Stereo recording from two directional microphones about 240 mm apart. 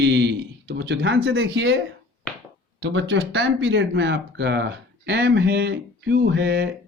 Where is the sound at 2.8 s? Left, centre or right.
Right.